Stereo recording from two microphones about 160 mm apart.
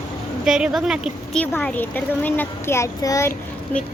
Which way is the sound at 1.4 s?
10° left (ahead or behind).